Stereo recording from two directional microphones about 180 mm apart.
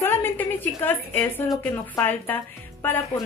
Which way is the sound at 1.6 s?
10° left (ahead or behind).